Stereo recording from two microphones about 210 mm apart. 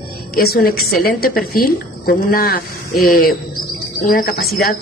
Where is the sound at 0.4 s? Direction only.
45° left (ahead or behind).